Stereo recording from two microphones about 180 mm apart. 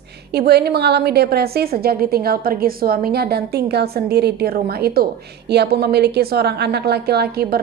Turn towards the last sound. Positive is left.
turn(degrees=-60)  # may be behind; listen again after turning